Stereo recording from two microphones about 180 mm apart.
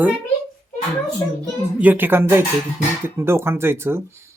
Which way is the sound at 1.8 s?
10° right (ahead or behind).